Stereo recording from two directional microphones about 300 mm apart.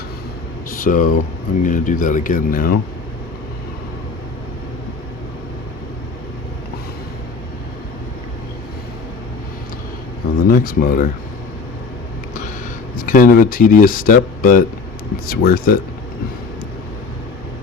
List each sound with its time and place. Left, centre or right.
0.7 s speech: left
10.4 s speech: left
13.0 s speech: left